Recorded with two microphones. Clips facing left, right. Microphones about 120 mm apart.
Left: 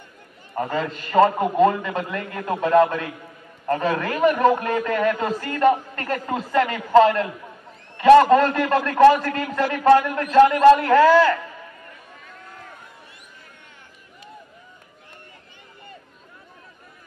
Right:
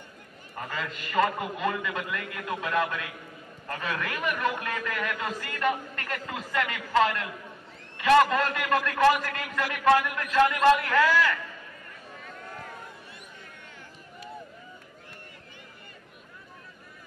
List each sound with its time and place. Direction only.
0.6 s a man's voice: 35° left (ahead or behind)